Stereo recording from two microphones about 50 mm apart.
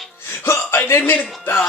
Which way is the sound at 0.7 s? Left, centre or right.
Left.